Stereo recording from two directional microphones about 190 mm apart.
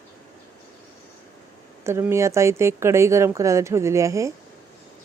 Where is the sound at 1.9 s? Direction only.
15° right (ahead or behind).